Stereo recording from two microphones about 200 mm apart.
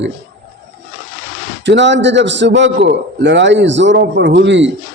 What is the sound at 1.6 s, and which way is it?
A man's voice, 60° right (ahead or behind).